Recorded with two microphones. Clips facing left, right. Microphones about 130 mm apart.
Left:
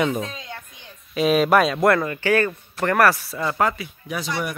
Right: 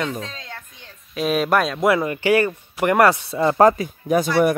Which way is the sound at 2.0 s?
15° right (ahead or behind).